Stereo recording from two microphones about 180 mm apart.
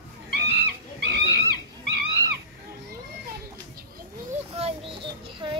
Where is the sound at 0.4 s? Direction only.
70° right (ahead or behind).